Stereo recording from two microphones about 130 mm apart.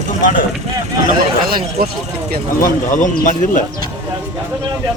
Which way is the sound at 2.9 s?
75° left (ahead or behind).